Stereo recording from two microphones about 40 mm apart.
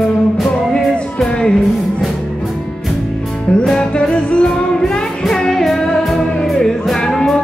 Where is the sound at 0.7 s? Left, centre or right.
Centre.